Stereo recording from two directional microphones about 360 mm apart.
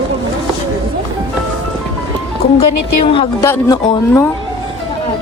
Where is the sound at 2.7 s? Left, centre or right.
Left.